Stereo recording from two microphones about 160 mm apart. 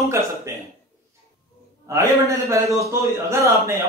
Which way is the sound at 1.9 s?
20° right (ahead or behind).